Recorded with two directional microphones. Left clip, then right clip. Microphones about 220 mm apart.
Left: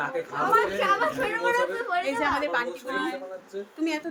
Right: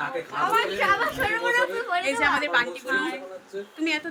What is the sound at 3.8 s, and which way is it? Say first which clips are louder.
Speech: right 3 dB; 25° left (ahead or behind).